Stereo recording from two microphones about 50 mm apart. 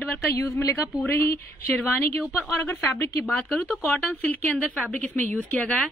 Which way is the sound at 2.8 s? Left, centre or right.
Left.